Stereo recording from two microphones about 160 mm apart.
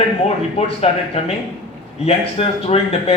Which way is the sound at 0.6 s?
40° left (ahead or behind).